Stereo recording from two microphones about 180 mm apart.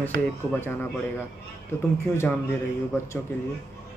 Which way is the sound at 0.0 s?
10° left (ahead or behind).